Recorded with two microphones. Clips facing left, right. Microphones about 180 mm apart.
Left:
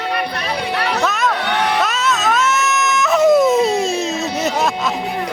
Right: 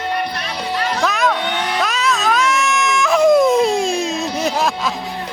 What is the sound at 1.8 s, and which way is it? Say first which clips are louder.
Dog: even; centre (ahead or behind).